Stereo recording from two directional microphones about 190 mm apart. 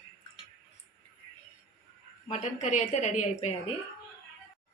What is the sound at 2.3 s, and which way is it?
A woman's voice, 40° left (ahead or behind).